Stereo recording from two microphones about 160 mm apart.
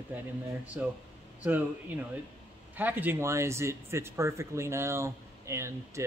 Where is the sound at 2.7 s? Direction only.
10° right (ahead or behind).